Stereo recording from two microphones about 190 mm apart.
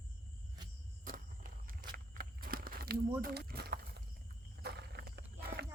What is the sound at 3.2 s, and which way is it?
Speech, 50° right (ahead or behind).